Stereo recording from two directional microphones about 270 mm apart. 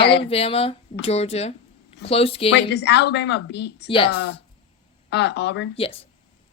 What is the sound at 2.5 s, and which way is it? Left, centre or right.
Speech, left.